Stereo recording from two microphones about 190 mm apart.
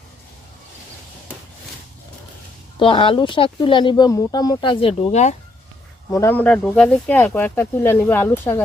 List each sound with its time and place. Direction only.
2.7 s speech: 25° left (ahead or behind)
6.1 s speech: 10° left (ahead or behind)